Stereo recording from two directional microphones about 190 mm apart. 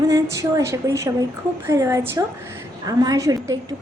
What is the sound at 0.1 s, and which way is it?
A woman's voice, 15° right (ahead or behind).